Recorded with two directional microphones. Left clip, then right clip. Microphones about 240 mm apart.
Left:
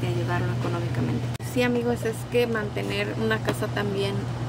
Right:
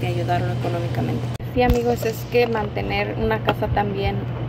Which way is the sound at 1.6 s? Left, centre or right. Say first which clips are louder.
Right 5 dB; left.